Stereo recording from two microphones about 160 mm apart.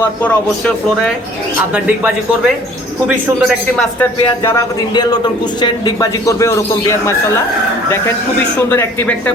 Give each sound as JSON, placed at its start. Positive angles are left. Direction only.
{"t": 3.1, "sound": "a man's voice", "side_deg": 0}
{"t": 4.4, "sound": "a man's voice", "side_deg": 20}
{"t": 8.7, "sound": "speech", "side_deg": 15}